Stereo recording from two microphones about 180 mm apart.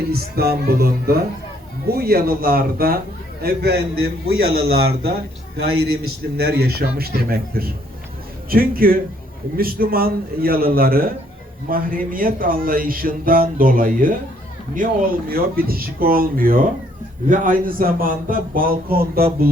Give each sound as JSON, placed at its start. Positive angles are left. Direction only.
{"t": 0.1, "sound": "a man's voice", "side_deg": -60}
{"t": 6.3, "sound": "a man's voice", "side_deg": -60}